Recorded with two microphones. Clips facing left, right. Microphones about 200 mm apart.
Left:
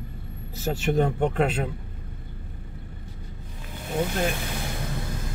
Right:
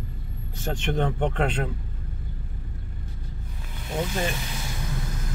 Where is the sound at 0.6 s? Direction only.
5° left (ahead or behind).